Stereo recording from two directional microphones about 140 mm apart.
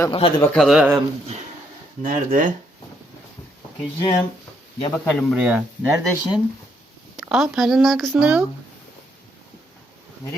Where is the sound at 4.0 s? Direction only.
30° left (ahead or behind).